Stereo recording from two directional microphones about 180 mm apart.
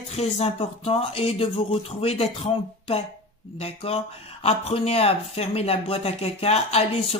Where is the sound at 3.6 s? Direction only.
35° left (ahead or behind).